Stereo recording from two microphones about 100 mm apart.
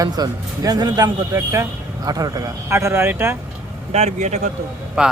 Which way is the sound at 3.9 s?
90° right.